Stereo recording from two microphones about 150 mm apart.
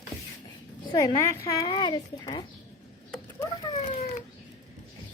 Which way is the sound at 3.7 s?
40° left (ahead or behind).